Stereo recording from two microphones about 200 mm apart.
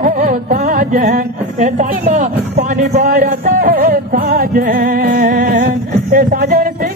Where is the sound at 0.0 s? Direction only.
45° right (ahead or behind).